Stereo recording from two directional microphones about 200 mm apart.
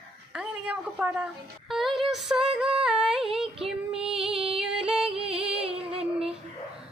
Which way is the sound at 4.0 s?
Centre (ahead or behind).